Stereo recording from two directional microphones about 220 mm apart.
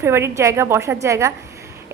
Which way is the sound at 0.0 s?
10° right (ahead or behind).